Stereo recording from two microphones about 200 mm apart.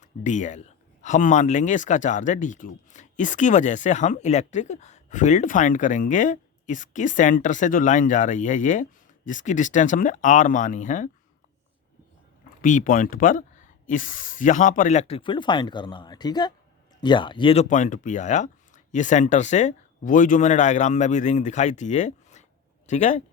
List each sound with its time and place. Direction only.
0.0 s speech: 40° left (ahead or behind)
12.6 s speech: 40° left (ahead or behind)